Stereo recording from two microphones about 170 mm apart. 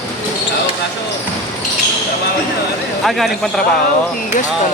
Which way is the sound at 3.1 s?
Centre (ahead or behind).